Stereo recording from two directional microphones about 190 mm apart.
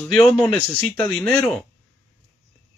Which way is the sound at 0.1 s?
Centre (ahead or behind).